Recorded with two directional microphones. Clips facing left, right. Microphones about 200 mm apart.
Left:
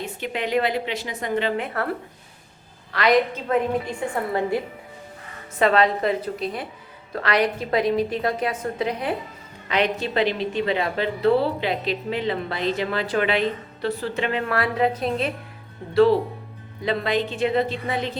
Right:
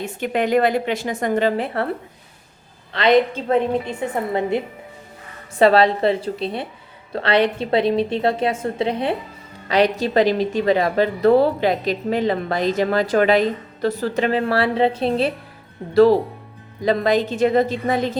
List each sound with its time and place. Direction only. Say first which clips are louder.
0.0 s a woman's voice: right 6 dB; 50° right (ahead or behind); by 1.9 s 30° right (ahead or behind)
2.9 s a woman's voice: right 3 dB; 25° right (ahead or behind)
5.5 s a woman's voice: right 5 dB; 35° right (ahead or behind)
16.8 s a woman's voice: right 5 dB; 40° right (ahead or behind)